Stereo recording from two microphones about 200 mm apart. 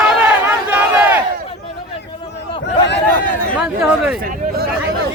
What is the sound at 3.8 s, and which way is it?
Speech, 5° right (ahead or behind).